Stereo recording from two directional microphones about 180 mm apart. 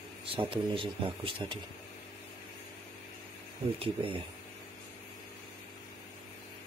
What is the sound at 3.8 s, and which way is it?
Speech, 30° right (ahead or behind).